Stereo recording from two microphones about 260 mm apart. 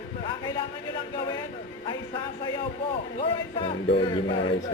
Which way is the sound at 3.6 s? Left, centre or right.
Centre.